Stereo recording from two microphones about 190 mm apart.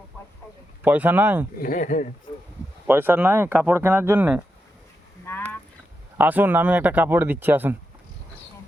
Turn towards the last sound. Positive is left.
turn(degrees=-10)  # may be behind; listen again after turning